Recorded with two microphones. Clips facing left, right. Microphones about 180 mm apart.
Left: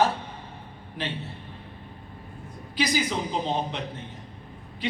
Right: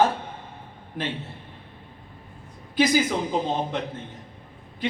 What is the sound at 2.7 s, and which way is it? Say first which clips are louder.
Speech: right 6 dB; 50° right (ahead or behind).